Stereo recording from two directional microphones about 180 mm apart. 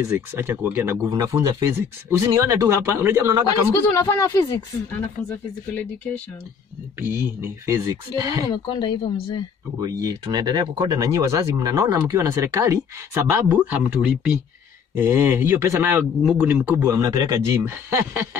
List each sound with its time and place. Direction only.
0.0 s speech: 15° right (ahead or behind)
3.9 s speech: 15° left (ahead or behind)
7.0 s speech: 15° right (ahead or behind)
8.5 s speech: 25° left (ahead or behind)
9.8 s speech: 20° right (ahead or behind)